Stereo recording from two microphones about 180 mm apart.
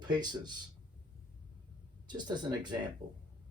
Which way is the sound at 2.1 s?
25° right (ahead or behind).